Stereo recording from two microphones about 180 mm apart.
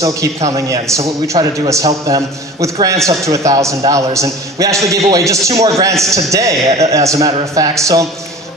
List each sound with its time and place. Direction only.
0.0 s a man's voice: 20° right (ahead or behind)